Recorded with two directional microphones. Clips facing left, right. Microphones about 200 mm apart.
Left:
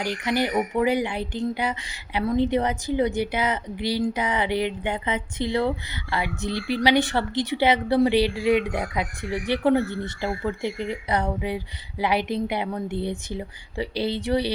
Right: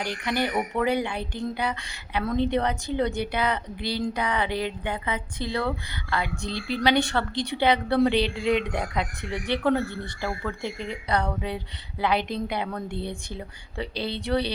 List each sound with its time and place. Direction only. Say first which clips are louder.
0.3 s a woman's voice: left 3 dB; 15° left (ahead or behind)